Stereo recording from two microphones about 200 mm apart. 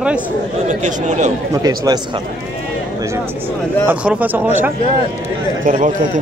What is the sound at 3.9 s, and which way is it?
Speech, 10° right (ahead or behind).